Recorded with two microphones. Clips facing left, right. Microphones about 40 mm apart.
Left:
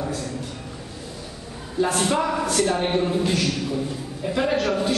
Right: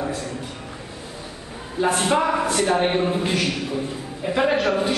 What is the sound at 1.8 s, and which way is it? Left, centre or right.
A man's voice, centre.